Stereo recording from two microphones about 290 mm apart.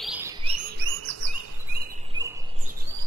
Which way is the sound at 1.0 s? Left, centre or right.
Right.